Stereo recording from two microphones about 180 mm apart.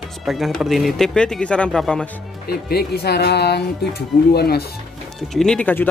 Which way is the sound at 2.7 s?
60° left (ahead or behind).